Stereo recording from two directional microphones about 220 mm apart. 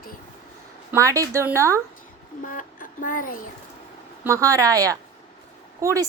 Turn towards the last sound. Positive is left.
turn(degrees=-15)  # may be behind; listen again after turning